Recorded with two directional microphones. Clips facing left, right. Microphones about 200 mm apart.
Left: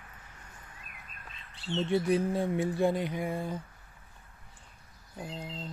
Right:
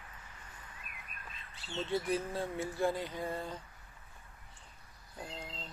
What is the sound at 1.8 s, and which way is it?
Speech, 15° left (ahead or behind).